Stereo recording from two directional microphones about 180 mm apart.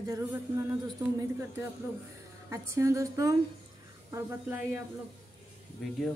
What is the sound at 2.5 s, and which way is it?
Speech, 15° right (ahead or behind).